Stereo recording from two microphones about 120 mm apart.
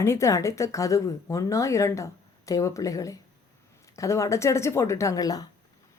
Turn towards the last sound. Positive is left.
turn(degrees=30)  # may be behind; listen again after turning